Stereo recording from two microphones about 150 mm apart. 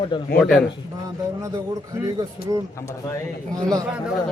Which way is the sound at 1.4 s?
20° right (ahead or behind).